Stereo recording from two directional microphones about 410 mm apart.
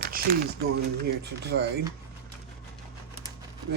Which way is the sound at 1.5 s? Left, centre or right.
Right.